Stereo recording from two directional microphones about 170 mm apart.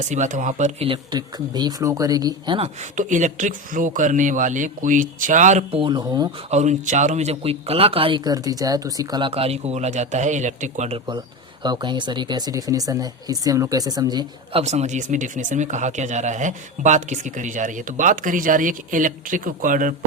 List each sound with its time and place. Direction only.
0.1 s speech: 45° right (ahead or behind)
0.8 s speech: 30° right (ahead or behind)
2.9 s speech: 50° right (ahead or behind)
5.8 s speech: 25° right (ahead or behind)
6.5 s speech: 45° right (ahead or behind)
11.6 s speech: 25° right (ahead or behind)
14.6 s speech: 40° right (ahead or behind)